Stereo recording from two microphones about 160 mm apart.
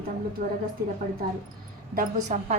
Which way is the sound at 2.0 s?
50° right (ahead or behind).